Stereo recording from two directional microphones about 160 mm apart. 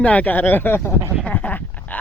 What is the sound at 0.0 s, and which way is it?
Speech, 10° left (ahead or behind).